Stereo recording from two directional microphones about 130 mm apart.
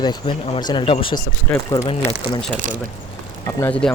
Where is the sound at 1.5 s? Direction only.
10° left (ahead or behind).